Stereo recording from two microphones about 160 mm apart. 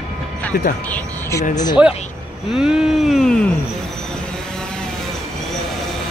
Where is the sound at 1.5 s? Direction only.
25° left (ahead or behind).